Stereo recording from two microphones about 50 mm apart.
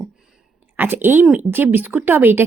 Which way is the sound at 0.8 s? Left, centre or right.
Right.